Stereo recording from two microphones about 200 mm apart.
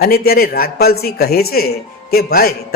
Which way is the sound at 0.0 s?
50° left (ahead or behind).